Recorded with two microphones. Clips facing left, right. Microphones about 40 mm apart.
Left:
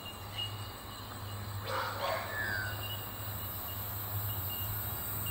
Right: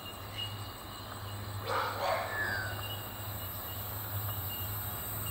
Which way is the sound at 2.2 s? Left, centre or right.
Centre.